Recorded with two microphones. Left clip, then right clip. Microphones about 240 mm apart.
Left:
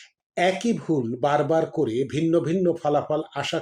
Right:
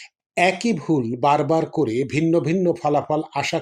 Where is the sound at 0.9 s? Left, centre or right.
Right.